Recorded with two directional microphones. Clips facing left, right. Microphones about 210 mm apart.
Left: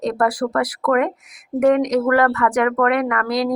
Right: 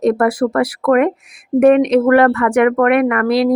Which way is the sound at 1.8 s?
30° right (ahead or behind).